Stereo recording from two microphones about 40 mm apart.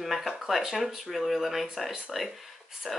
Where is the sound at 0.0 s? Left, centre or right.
Centre.